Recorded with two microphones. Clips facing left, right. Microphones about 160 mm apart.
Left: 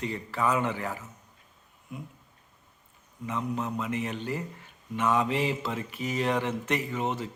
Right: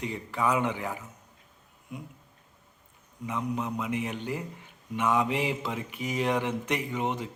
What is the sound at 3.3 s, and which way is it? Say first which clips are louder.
Mantra: even; 10° right (ahead or behind).